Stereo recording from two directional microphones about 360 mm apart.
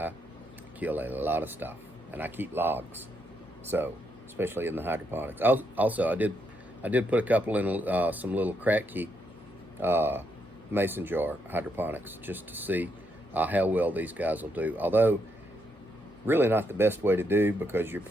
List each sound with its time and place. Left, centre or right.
0.8 s speech: centre
16.2 s speech: centre